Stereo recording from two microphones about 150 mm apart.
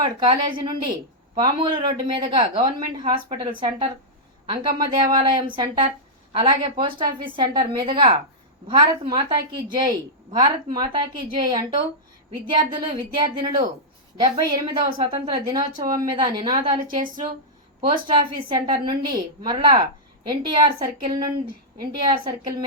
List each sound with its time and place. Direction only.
0.0 s a woman's voice: 30° right (ahead or behind)
18.4 s a woman's voice: 30° right (ahead or behind)